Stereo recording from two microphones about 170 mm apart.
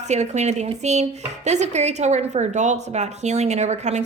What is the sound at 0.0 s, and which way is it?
A woman's voice, 40° right (ahead or behind).